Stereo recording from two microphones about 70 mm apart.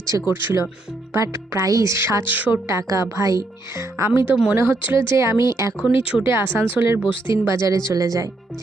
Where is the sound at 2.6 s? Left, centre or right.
Right.